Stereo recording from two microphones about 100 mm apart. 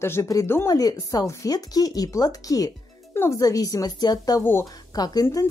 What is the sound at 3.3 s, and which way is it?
A woman's voice, 35° left (ahead or behind).